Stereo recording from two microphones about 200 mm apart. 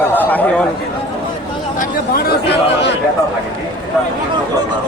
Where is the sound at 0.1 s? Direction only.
10° left (ahead or behind).